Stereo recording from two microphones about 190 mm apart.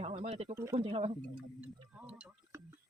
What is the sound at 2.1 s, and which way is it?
Speech, 5° right (ahead or behind).